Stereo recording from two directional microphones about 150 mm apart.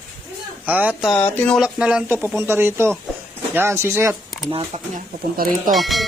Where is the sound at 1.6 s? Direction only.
5° right (ahead or behind).